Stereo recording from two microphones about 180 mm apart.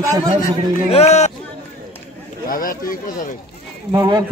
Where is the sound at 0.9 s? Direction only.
35° left (ahead or behind).